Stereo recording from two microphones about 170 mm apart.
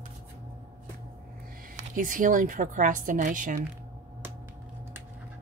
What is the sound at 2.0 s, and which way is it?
Speech, 55° right (ahead or behind).